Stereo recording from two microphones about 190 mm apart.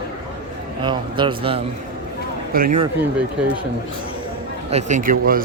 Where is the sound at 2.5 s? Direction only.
50° right (ahead or behind).